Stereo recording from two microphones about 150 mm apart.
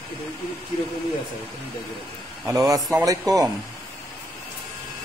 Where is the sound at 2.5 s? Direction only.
25° right (ahead or behind).